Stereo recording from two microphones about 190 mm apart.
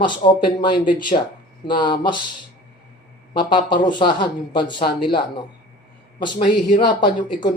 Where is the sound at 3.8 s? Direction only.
25° left (ahead or behind).